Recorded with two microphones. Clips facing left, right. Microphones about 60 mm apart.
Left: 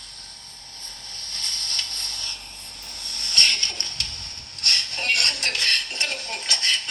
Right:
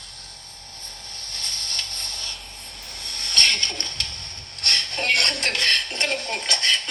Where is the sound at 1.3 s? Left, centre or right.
Left.